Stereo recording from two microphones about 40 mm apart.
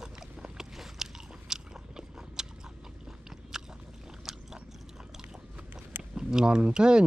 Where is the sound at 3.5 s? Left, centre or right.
Centre.